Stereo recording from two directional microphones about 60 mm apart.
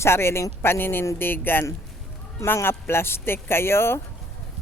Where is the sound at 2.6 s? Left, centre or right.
Left.